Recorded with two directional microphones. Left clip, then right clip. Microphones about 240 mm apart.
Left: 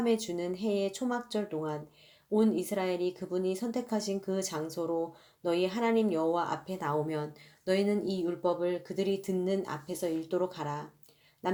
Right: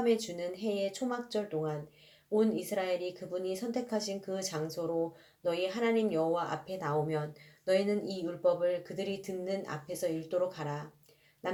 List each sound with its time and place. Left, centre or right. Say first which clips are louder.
0.0 s speech: even; left